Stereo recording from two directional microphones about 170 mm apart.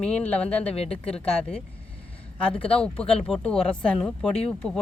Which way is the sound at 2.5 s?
35° left (ahead or behind).